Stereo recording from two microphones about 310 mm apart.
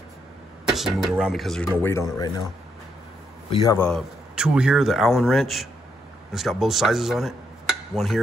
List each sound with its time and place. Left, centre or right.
0.7 s a man's voice: centre
3.5 s a man's voice: centre